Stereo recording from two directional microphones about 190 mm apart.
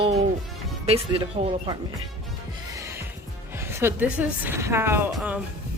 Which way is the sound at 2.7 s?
15° right (ahead or behind).